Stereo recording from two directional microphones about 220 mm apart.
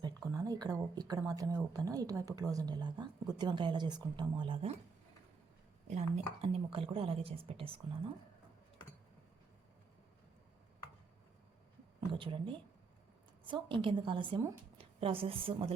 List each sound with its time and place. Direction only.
0.0 s a woman's voice: 15° right (ahead or behind)
5.9 s a woman's voice: 30° right (ahead or behind)
11.9 s a woman's voice: 20° right (ahead or behind)